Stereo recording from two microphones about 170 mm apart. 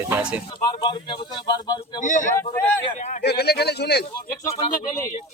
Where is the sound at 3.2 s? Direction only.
70° left (ahead or behind).